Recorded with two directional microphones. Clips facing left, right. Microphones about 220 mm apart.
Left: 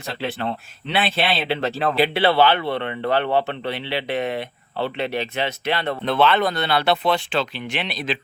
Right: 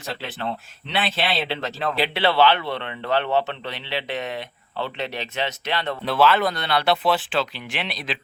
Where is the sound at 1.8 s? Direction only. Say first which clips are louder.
Left 3 dB; 50° left (ahead or behind).